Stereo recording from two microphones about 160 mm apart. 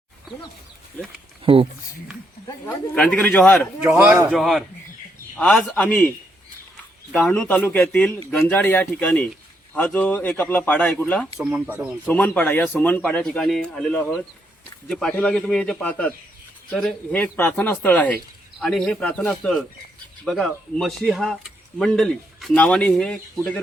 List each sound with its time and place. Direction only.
2.9 s a man's voice: 5° left (ahead or behind)
3.8 s a man's voice: 15° right (ahead or behind)
4.3 s a man's voice: centre (ahead or behind)
7.1 s a man's voice: 5° left (ahead or behind)
11.3 s a man's voice: 5° right (ahead or behind)
12.0 s a man's voice: 10° left (ahead or behind)